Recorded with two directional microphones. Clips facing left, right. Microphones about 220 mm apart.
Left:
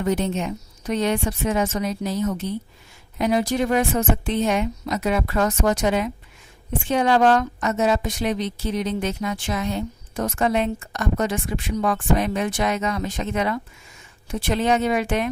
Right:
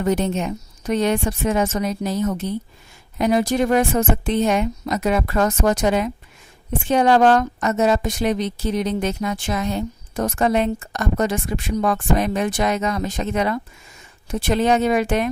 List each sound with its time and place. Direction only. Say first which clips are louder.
0.0 s a woman's voice: right 2 dB; 45° right (ahead or behind)